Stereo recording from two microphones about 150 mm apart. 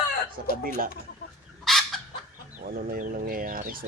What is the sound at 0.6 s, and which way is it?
Speech, 70° right (ahead or behind).